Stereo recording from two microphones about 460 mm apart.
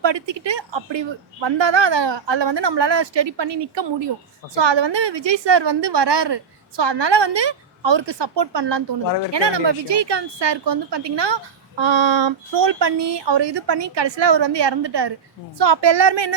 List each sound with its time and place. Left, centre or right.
0.0 s a woman's voice: right
11.8 s a woman's voice: right